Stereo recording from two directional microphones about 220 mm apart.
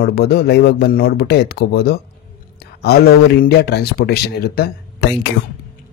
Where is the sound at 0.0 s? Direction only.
45° left (ahead or behind).